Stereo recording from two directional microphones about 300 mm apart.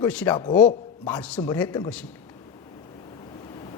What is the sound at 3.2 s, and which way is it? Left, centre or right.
Waves, centre.